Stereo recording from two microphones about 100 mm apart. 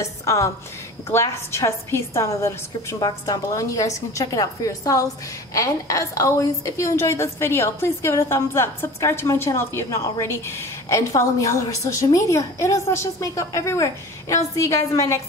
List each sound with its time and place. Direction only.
0.0 s a woman's voice: 30° left (ahead or behind)